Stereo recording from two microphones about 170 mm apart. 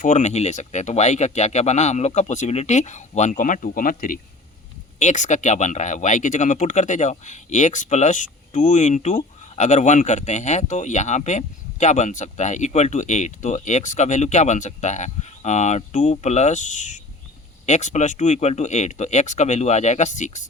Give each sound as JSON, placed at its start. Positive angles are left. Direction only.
{"t": 0.0, "sound": "speech", "side_deg": 45}